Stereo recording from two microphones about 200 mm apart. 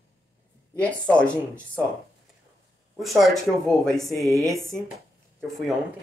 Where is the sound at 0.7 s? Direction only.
5° left (ahead or behind).